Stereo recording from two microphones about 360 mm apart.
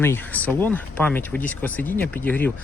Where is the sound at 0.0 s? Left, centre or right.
Centre.